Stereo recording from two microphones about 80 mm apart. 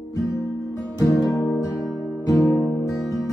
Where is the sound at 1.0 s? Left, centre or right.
Left.